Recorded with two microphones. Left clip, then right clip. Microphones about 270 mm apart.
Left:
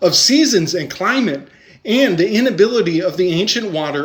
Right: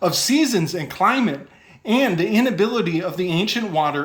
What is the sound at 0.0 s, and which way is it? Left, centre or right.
Speech, centre.